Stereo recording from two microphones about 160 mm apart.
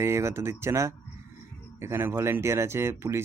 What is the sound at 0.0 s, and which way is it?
Speech, 15° right (ahead or behind).